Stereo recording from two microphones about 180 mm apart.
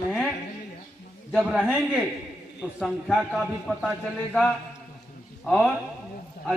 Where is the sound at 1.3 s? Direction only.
Centre (ahead or behind).